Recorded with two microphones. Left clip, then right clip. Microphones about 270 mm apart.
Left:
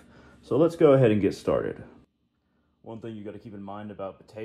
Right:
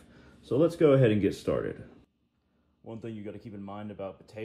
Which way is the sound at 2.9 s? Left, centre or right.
Centre.